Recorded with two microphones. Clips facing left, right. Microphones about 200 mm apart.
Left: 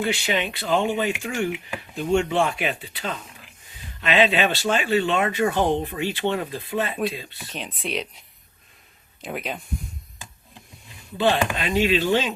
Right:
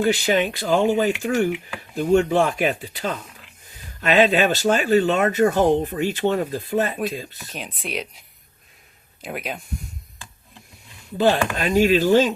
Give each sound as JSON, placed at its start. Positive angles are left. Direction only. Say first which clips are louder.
{"t": 0.0, "sound": "speech", "louder": "right 5 dB", "side_deg": -45}
{"t": 7.5, "sound": "speech", "louder": "left 1 dB", "side_deg": 0}
{"t": 9.2, "sound": "speech", "louder": "even", "side_deg": 0}
{"t": 11.5, "sound": "speech", "louder": "right 4 dB", "side_deg": -45}